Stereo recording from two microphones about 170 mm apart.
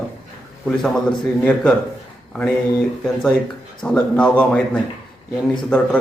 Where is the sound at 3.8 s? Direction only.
5° left (ahead or behind).